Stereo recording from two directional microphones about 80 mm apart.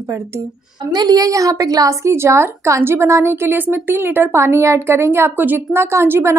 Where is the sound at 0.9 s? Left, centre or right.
Right.